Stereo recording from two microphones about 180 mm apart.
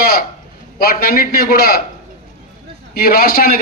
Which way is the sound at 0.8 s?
55° left (ahead or behind).